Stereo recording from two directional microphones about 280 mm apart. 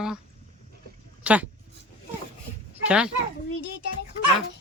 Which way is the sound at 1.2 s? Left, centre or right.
Centre.